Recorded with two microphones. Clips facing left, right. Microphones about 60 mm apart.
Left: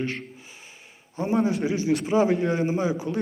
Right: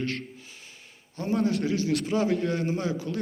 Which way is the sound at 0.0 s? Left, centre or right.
Centre.